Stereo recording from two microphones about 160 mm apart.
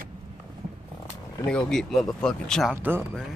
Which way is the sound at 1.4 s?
5° left (ahead or behind).